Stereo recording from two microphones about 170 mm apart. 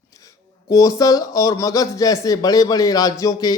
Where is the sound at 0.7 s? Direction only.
20° left (ahead or behind).